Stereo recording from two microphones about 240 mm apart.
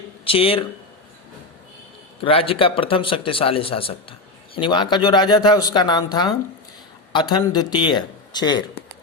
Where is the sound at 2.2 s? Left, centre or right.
Left.